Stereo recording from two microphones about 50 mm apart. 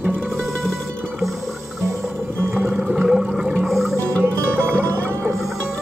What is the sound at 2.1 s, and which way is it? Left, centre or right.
Music, right.